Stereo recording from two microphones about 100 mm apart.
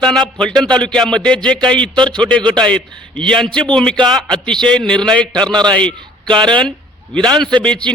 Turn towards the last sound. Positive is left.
turn(degrees=10)  # may be behind; listen again after turning